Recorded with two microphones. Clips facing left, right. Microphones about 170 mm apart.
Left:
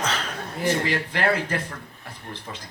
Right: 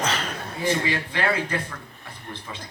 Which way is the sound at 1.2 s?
40° left (ahead or behind).